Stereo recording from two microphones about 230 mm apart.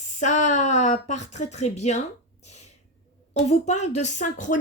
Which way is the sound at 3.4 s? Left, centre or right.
Left.